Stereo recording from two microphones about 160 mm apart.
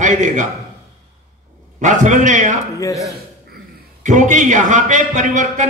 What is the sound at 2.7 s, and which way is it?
Speech, 20° left (ahead or behind).